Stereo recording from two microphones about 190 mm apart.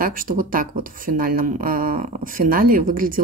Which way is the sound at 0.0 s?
45° right (ahead or behind).